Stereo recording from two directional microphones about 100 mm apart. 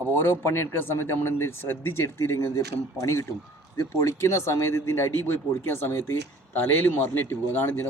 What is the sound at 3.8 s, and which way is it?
Speech, 30° left (ahead or behind).